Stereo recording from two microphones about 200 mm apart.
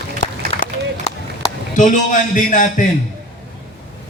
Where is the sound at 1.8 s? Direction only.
40° left (ahead or behind).